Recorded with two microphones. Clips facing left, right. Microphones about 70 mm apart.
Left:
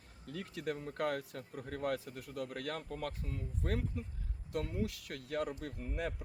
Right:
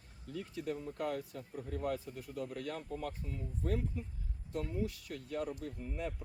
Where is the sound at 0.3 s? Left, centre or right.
Left.